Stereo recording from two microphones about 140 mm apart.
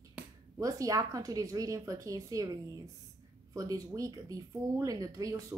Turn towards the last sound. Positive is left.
turn(degrees=-25)  # may be behind; listen again after turning